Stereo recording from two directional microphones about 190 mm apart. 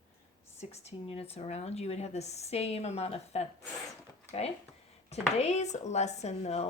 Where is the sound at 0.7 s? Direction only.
35° left (ahead or behind).